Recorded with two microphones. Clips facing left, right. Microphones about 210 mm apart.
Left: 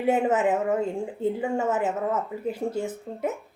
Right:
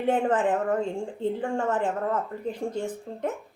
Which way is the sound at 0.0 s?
10° left (ahead or behind).